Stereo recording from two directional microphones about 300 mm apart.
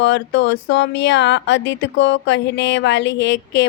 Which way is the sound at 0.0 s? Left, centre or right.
Left.